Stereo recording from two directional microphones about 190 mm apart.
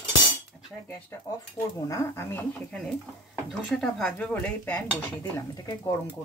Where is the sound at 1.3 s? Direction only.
15° left (ahead or behind).